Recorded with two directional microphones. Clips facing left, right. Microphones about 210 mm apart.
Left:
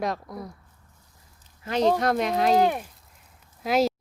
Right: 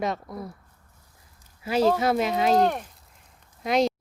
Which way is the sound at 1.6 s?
5° right (ahead or behind).